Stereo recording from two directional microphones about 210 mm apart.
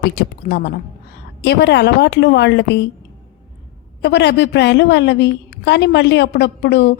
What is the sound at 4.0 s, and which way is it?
A woman's voice, 55° left (ahead or behind).